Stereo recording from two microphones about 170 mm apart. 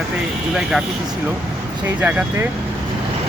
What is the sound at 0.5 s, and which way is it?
Speech, 5° right (ahead or behind).